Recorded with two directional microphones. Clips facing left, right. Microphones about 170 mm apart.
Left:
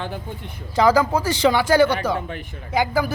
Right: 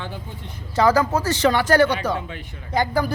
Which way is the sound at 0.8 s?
10° left (ahead or behind).